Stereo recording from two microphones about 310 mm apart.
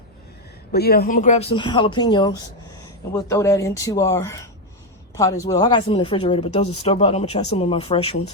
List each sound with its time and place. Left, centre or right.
0.7 s speech: left